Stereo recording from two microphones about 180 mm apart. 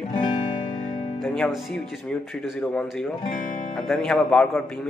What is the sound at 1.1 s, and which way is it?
Speech, centre (ahead or behind).